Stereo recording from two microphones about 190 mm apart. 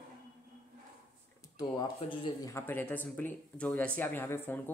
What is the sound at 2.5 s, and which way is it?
Speech, 10° left (ahead or behind).